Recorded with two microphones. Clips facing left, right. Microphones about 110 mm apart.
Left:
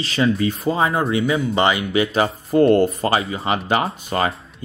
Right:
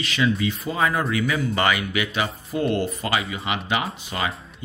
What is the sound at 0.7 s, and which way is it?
Speech, 25° left (ahead or behind).